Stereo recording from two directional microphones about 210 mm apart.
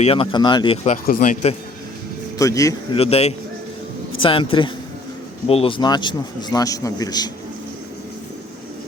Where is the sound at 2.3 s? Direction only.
15° left (ahead or behind).